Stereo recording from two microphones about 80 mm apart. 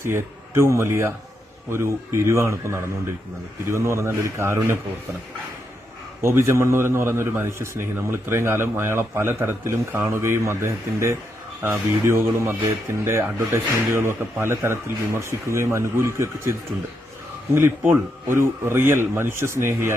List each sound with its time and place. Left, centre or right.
0.0 s a man's voice: right
6.2 s a man's voice: right